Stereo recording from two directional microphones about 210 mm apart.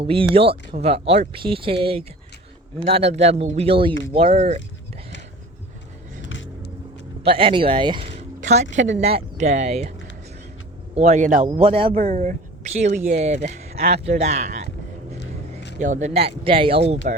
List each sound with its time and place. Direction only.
0.0 s speech: 25° right (ahead or behind)
6.2 s vehicle: 60° left (ahead or behind)
7.3 s speech: 25° right (ahead or behind)
10.9 s speech: 35° right (ahead or behind)
11.4 s speech: 25° right (ahead or behind)
15.2 s a sound: 55° left (ahead or behind)
15.8 s speech: 35° right (ahead or behind)